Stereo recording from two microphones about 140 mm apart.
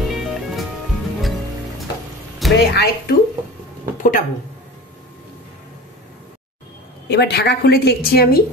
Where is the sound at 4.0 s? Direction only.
70° left (ahead or behind).